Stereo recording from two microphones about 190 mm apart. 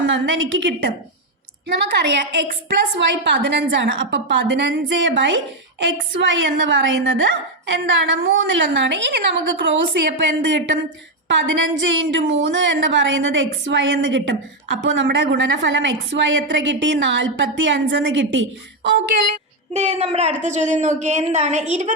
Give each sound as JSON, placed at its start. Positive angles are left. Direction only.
{"t": 0.0, "sound": "a woman's voice", "side_deg": -85}
{"t": 1.6, "sound": "a woman's voice", "side_deg": -60}
{"t": 19.7, "sound": "a woman's voice", "side_deg": -35}